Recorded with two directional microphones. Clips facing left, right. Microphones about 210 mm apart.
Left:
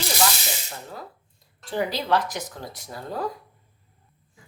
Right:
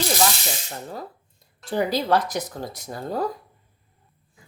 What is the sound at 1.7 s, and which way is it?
Speech, 40° right (ahead or behind).